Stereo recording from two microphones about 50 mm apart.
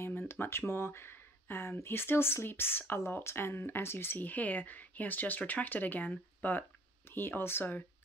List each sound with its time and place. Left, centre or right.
0.3 s speech: left
7.1 s speech: left